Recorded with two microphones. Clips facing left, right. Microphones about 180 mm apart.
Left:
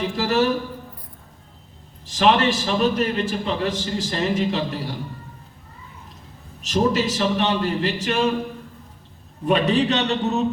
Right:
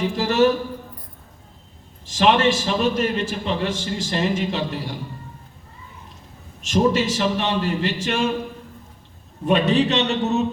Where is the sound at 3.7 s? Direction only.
35° left (ahead or behind).